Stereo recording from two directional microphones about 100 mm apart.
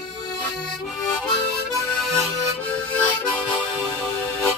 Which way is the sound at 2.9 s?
10° left (ahead or behind).